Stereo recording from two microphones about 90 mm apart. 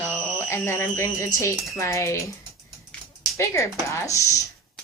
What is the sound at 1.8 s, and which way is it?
Speech, 35° left (ahead or behind).